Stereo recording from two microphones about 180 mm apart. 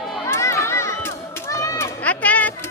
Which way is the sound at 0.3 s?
15° left (ahead or behind).